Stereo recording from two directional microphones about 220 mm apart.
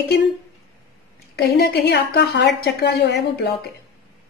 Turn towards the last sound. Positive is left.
turn(degrees=50)  # may be behind; listen again after turning